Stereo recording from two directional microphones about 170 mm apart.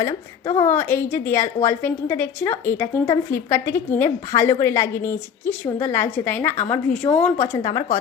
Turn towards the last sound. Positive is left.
turn(degrees=15)  # may be behind; listen again after turning